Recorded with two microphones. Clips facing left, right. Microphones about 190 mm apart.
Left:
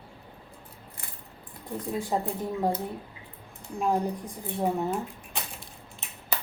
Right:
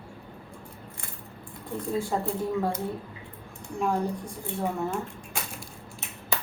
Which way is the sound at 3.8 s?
20° left (ahead or behind).